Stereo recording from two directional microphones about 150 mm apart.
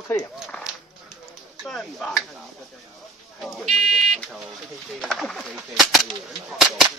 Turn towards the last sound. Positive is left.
turn(degrees=0)  # may be behind; listen again after turning